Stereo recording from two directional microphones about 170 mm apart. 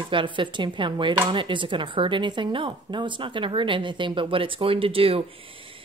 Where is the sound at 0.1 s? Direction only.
30° right (ahead or behind).